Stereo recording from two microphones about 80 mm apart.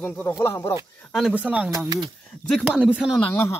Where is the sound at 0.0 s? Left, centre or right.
Left.